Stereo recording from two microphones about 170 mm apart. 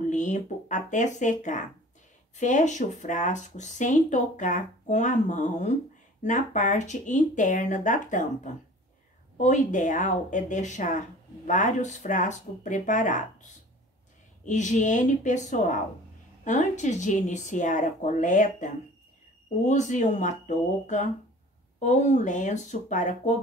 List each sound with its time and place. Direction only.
0.1 s speech: 45° left (ahead or behind)
9.4 s speech: 45° left (ahead or behind)